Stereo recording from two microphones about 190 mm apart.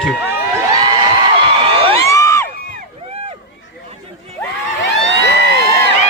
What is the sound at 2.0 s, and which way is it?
Crowd, 15° left (ahead or behind).